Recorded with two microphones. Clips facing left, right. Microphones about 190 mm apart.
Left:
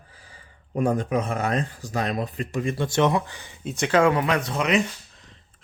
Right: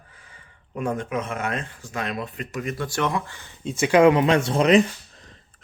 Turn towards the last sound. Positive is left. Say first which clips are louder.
# right 5 dB
turn(degrees=-30)  # may be behind; listen again after turning